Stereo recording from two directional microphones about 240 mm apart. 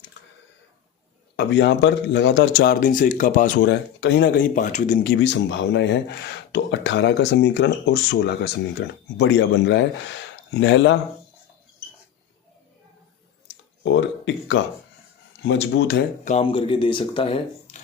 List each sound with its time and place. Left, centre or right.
1.4 s speech: left
5.1 s speech: left
13.8 s speech: left
16.2 s speech: left